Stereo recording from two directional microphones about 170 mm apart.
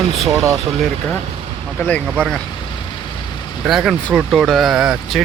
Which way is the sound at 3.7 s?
Centre (ahead or behind).